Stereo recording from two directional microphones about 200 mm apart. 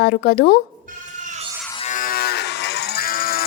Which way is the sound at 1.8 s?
40° left (ahead or behind).